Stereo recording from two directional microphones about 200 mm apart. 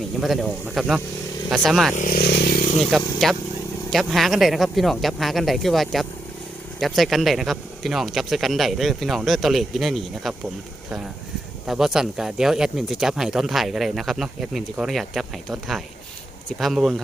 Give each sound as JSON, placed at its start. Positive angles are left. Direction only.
{"t": 0.2, "sound": "speech", "side_deg": 0}
{"t": 2.0, "sound": "a sound", "side_deg": 45}
{"t": 3.2, "sound": "speech", "side_deg": 0}
{"t": 11.6, "sound": "speech", "side_deg": 0}